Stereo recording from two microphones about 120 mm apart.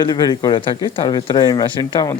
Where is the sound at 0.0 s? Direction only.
35° left (ahead or behind).